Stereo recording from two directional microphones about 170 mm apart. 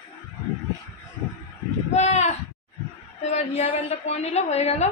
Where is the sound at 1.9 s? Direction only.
40° left (ahead or behind).